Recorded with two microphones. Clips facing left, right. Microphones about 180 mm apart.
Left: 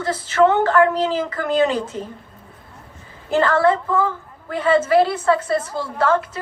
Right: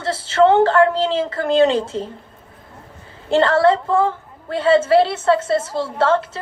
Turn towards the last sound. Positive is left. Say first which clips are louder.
# right 2 dB
turn(degrees=-25)  # may be behind; listen again after turning